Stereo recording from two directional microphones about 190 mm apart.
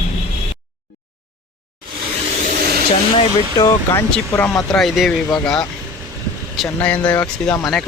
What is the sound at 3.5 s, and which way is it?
Speech, 20° left (ahead or behind).